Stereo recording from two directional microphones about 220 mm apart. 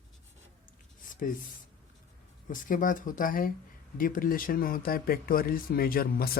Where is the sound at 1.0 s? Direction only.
40° left (ahead or behind).